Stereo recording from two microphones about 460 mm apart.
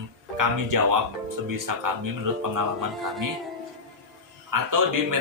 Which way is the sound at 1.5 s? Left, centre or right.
Right.